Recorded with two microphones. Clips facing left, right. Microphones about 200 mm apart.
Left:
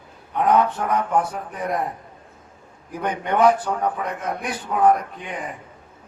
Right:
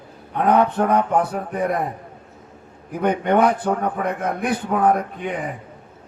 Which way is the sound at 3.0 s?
60° right (ahead or behind).